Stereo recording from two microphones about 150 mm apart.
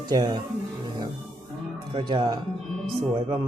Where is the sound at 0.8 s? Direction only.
30° right (ahead or behind).